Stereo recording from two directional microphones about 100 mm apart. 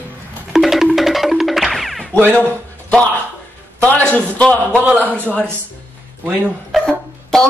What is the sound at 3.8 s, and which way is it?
Speech, 15° left (ahead or behind).